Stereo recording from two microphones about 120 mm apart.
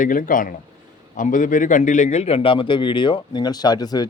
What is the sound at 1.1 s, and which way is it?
Speech, 90° left.